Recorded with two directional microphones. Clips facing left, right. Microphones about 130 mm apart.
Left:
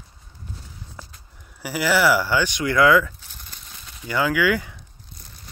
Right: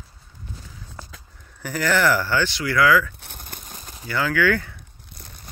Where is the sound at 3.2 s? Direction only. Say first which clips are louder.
Right 5 dB; 55° right (ahead or behind).